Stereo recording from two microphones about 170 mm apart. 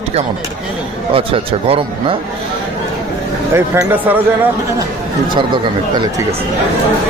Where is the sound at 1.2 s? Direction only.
35° right (ahead or behind).